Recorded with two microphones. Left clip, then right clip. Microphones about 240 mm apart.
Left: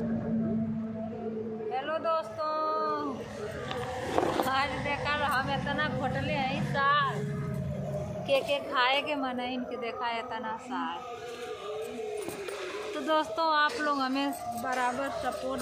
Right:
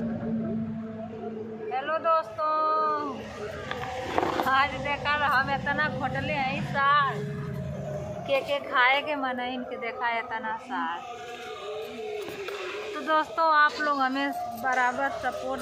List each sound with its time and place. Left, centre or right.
1.7 s a sound: centre
4.2 s a woman's voice: centre
8.3 s a woman's voice: centre
13.0 s a woman's voice: left